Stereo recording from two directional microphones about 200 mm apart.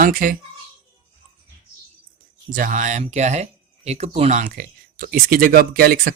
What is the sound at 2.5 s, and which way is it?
Speech, 40° right (ahead or behind).